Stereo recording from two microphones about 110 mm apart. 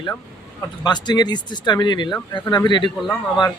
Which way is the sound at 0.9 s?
40° left (ahead or behind).